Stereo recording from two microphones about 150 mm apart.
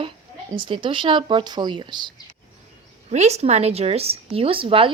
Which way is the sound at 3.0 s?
50° right (ahead or behind).